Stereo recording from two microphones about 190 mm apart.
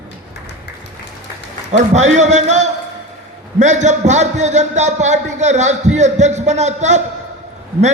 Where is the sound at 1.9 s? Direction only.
40° right (ahead or behind).